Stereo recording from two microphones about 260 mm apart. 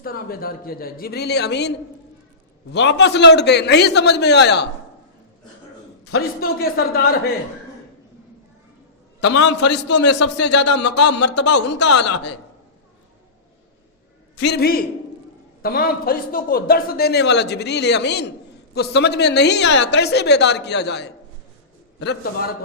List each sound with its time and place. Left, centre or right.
0.0 s a man's voice: left
2.7 s a man's voice: left
6.4 s a man's voice: left
9.2 s a man's voice: left
9.6 s speech: left
14.4 s a man's voice: left